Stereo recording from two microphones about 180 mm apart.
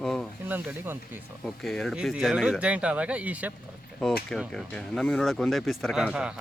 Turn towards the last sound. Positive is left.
turn(degrees=-5)  # may be behind; listen again after turning